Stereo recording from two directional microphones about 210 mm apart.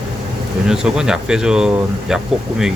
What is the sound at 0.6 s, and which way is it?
Speech, 5° right (ahead or behind).